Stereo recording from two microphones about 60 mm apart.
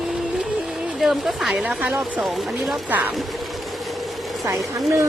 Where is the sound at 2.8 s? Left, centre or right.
Right.